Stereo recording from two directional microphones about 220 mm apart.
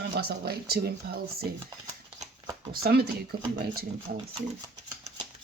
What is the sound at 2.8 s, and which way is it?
Speech, 45° right (ahead or behind).